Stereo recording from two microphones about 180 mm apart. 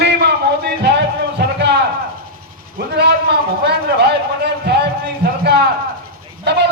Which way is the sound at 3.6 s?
65° right (ahead or behind).